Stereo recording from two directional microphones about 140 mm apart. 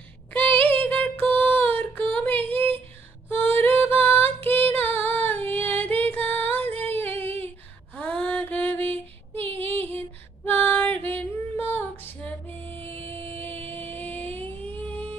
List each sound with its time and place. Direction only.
0.3 s child singing: 10° left (ahead or behind)
3.3 s female singing: 15° left (ahead or behind)
7.4 s a sound: 10° left (ahead or behind)
9.5 s female singing: 15° left (ahead or behind)
12.6 s music: 40° right (ahead or behind)
12.9 s music: 15° left (ahead or behind)